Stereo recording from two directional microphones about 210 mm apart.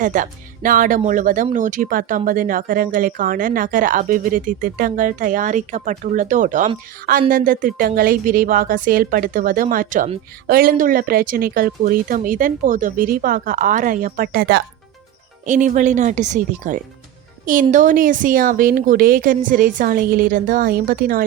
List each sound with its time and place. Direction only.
0.0 s speech: 35° right (ahead or behind)
15.4 s speech: 35° right (ahead or behind)